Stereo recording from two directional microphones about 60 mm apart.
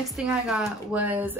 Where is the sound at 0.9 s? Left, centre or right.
Right.